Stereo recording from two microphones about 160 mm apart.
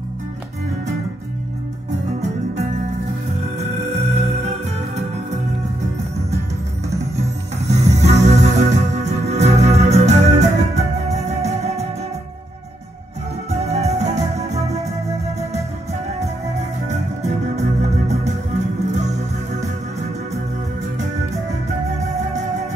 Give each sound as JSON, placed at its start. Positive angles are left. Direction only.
{"t": 3.5, "sound": "music", "side_deg": -45}
{"t": 6.9, "sound": "music", "side_deg": -20}
{"t": 7.6, "sound": "music", "side_deg": -45}
{"t": 13.5, "sound": "music", "side_deg": -45}
{"t": 16.5, "sound": "organ", "side_deg": -45}